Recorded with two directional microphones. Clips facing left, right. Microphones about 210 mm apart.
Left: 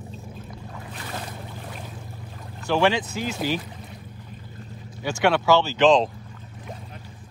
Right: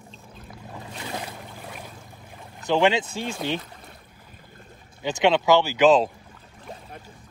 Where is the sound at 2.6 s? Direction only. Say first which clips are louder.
Right 1 dB; 20° right (ahead or behind).